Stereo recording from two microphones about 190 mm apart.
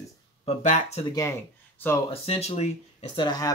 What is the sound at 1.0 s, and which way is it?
Speech, 15° left (ahead or behind).